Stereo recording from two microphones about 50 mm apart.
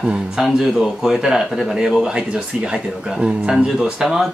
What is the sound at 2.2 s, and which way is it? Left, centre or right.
Speech, right.